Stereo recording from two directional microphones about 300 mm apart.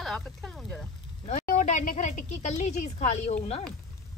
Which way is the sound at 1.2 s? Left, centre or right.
Left.